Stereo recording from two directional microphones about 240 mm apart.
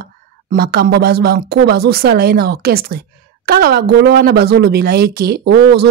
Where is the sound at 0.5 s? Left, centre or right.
Right.